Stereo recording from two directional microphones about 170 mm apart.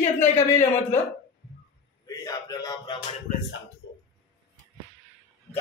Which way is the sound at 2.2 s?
20° left (ahead or behind).